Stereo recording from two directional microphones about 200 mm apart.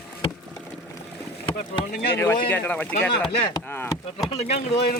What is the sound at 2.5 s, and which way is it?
Speech, 10° left (ahead or behind).